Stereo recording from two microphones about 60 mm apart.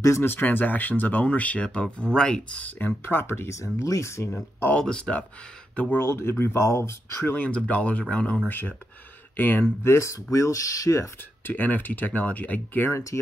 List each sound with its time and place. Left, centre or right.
0.2 s speech: left; by 2.7 s centre
2.9 s speech: left
4.6 s speech: centre
5.9 s speech: left
7.2 s speech: left
8.5 s speech: left
9.8 s speech: left
11.4 s speech: left
12.9 s speech: left